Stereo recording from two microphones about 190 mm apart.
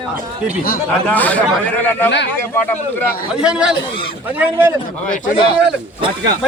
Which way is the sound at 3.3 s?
5° right (ahead or behind).